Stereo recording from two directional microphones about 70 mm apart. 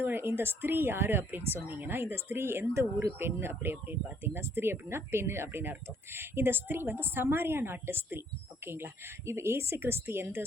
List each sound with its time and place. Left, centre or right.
0.0 s a woman's voice: right